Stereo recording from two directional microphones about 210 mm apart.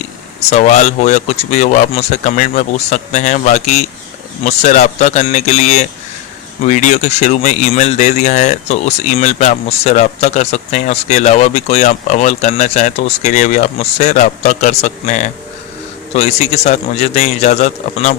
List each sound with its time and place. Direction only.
0.3 s speech: 35° left (ahead or behind)